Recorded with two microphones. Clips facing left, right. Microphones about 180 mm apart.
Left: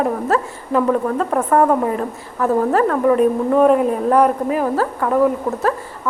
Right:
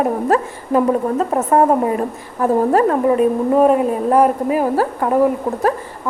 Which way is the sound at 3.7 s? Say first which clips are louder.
Even; 5° right (ahead or behind).